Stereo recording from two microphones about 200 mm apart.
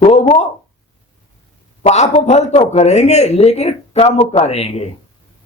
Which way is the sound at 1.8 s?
30° left (ahead or behind).